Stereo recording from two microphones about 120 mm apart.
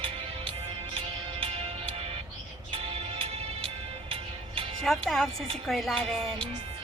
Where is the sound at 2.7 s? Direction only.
50° right (ahead or behind).